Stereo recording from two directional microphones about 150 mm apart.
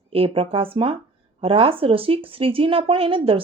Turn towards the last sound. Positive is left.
turn(degrees=-35)  # may be behind; listen again after turning